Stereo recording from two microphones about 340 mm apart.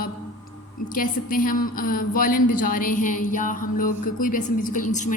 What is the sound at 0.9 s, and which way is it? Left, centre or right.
A woman's voice, left.